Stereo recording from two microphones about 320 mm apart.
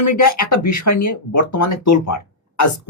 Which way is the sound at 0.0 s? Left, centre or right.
Left.